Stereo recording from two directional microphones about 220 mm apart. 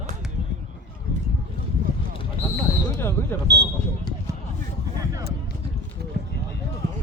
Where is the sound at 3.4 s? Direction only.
50° right (ahead or behind).